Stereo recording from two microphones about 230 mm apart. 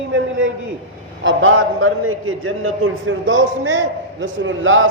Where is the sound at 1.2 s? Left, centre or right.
Right.